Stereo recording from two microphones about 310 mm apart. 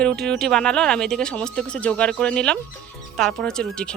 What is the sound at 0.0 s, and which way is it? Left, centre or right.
Speech, centre.